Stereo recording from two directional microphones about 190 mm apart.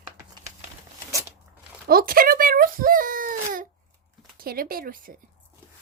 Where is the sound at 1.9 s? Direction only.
50° right (ahead or behind).